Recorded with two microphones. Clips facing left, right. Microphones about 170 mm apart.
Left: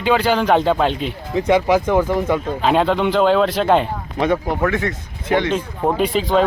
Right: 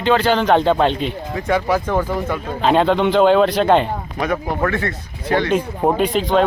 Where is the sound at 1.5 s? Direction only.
20° left (ahead or behind).